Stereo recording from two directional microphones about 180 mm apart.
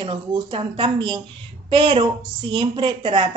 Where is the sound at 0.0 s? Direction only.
25° right (ahead or behind).